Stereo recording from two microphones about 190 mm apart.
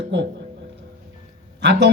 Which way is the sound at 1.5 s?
65° right (ahead or behind).